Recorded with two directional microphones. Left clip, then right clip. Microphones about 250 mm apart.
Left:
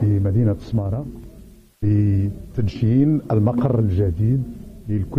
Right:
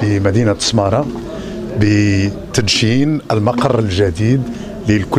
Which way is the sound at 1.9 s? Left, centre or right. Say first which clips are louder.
Right 7 dB; centre.